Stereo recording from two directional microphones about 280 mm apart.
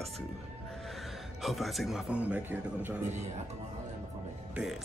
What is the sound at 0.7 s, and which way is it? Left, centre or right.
Speech, centre.